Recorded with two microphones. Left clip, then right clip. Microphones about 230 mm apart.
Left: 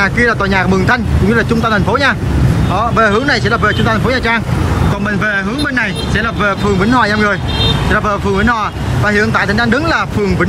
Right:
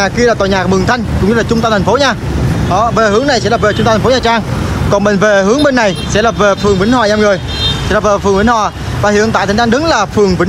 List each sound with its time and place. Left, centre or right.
0.0 s speech: centre